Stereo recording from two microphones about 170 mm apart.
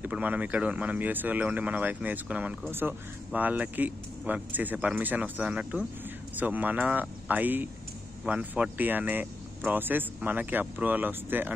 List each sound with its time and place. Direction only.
0.0 s speech: 10° right (ahead or behind)